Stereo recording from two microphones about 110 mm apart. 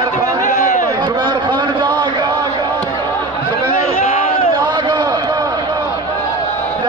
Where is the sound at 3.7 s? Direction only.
60° left (ahead or behind).